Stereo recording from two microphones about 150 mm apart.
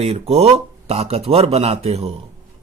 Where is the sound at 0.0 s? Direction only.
45° right (ahead or behind).